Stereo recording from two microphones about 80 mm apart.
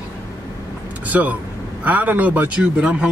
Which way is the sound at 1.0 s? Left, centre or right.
Right.